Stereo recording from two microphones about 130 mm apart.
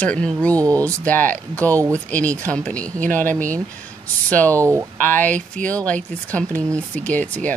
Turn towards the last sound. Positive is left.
turn(degrees=10)  # may be behind; listen again after turning